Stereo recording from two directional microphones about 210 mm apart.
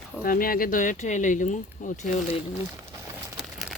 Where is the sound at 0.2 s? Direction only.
45° left (ahead or behind).